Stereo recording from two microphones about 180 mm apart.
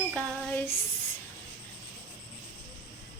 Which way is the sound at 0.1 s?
10° left (ahead or behind).